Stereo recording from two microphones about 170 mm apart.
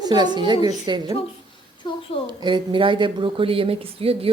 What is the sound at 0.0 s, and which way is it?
A woman's voice, 25° right (ahead or behind).